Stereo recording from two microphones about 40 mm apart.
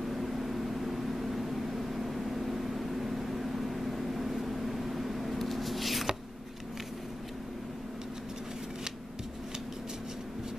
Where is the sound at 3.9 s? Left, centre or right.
Centre.